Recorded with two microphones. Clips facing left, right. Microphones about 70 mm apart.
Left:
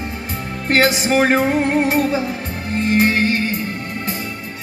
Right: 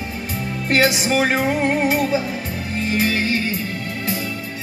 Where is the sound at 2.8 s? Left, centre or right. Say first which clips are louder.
Left 5 dB; left.